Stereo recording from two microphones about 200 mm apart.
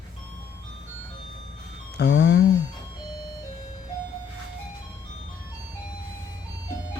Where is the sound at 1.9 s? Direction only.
60° left (ahead or behind).